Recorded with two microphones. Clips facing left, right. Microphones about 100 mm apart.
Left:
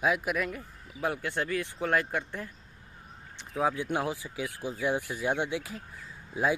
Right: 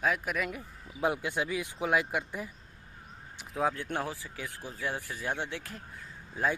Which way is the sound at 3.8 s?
10° left (ahead or behind).